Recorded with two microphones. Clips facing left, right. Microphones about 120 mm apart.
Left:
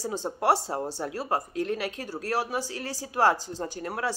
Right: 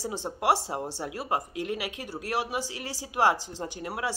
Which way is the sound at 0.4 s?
15° right (ahead or behind).